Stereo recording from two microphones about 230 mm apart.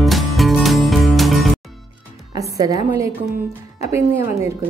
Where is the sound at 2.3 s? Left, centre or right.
Centre.